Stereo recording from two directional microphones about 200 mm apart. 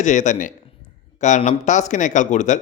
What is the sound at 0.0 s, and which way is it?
A man's voice, 40° left (ahead or behind).